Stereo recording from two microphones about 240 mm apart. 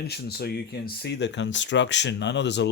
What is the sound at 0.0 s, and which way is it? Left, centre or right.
Speech, left.